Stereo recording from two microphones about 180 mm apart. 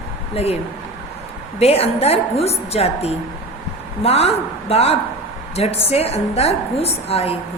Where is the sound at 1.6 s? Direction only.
35° left (ahead or behind).